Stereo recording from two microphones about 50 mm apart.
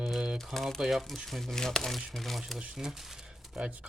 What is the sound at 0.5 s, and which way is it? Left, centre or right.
Speech, centre.